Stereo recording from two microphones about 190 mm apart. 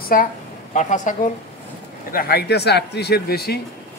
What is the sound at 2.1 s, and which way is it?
Speech, 55° left (ahead or behind).